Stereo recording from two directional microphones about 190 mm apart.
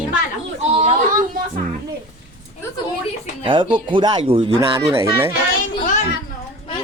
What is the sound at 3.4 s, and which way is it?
Speech, 25° right (ahead or behind).